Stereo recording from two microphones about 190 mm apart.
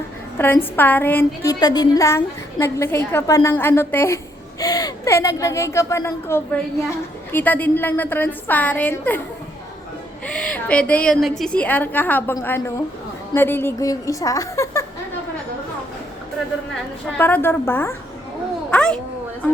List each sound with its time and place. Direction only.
0.3 s a woman's voice: 10° left (ahead or behind)
10.2 s a woman's voice: 5° left (ahead or behind)
17.2 s a woman's voice: 10° left (ahead or behind)